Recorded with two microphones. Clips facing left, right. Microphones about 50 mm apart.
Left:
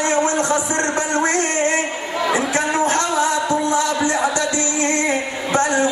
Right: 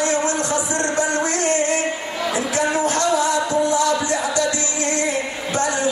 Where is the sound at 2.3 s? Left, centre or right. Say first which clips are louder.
Even; left.